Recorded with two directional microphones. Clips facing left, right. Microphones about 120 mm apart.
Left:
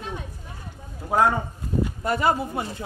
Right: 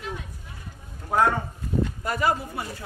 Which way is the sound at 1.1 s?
15° left (ahead or behind).